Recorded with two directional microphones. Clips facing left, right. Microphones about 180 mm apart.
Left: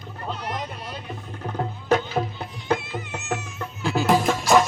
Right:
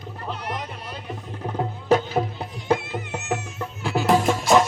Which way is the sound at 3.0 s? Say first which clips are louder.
Right 2 dB; 60° right (ahead or behind).